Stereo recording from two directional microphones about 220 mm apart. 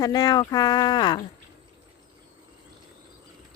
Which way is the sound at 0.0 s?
15° left (ahead or behind).